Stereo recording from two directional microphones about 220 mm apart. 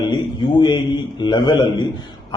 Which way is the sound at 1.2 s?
20° left (ahead or behind).